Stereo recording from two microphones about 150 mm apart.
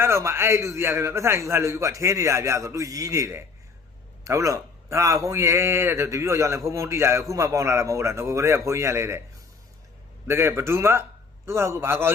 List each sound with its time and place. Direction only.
0.0 s a man's voice: 20° right (ahead or behind)
10.2 s speech: 15° right (ahead or behind)